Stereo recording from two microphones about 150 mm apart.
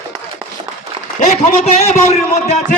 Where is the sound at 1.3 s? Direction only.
50° left (ahead or behind).